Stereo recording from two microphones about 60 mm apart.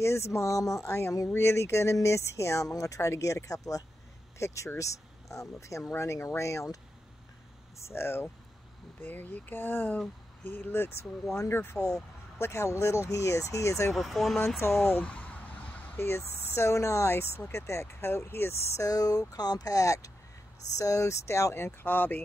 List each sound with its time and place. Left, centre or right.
0.0 s speech: left
1.3 s speech: left
4.4 s speech: left
7.8 s speech: left
9.0 s speech: left
13.9 s speech: centre
14.6 s speech: left
15.0 s a sound: left
16.0 s speech: left
18.8 s speech: left